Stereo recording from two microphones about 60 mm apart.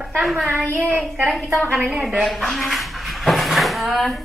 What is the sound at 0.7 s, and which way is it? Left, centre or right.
Child singing, right.